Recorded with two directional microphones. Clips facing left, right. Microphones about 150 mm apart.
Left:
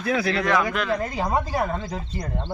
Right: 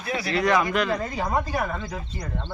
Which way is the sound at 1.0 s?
20° left (ahead or behind).